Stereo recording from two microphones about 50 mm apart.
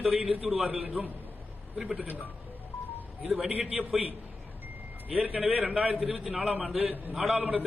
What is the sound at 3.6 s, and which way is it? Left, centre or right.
Speech, right.